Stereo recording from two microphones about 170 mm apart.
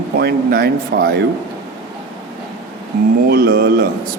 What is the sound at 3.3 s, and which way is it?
Speech, 65° right (ahead or behind).